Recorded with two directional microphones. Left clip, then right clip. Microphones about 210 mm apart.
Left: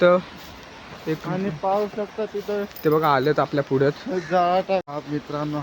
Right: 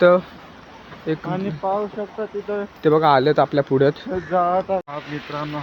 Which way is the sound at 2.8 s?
10° right (ahead or behind).